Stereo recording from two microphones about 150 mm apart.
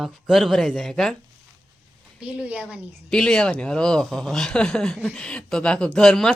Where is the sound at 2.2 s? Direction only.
10° right (ahead or behind).